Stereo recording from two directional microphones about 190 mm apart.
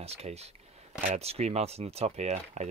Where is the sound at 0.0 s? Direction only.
35° right (ahead or behind).